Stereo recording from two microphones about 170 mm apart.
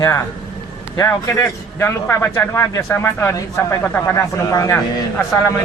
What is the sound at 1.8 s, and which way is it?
A man's voice, 15° left (ahead or behind).